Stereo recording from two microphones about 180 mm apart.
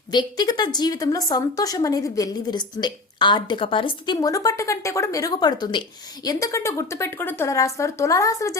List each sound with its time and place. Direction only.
0.1 s a woman's voice: 25° left (ahead or behind)